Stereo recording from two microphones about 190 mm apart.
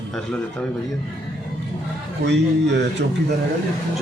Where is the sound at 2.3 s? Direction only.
65° right (ahead or behind).